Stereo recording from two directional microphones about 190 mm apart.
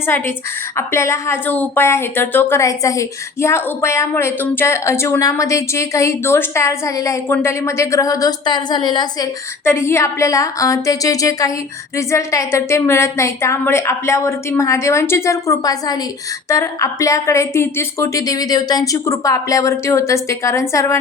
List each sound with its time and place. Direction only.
0.1 s a woman's voice: 10° left (ahead or behind)
9.6 s a woman's voice: 10° left (ahead or behind)